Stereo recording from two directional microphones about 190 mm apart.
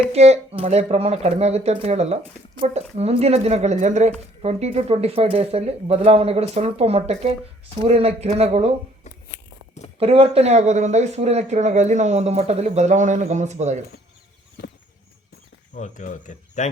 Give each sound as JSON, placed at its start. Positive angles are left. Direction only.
{"t": 0.1, "sound": "speech", "side_deg": -35}
{"t": 10.0, "sound": "speech", "side_deg": -30}
{"t": 15.7, "sound": "speech", "side_deg": 40}